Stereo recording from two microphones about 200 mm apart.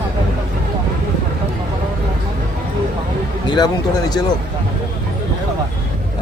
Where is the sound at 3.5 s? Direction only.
20° left (ahead or behind).